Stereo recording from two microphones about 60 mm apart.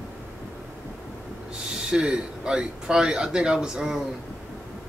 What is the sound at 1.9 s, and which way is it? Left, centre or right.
Speech, centre.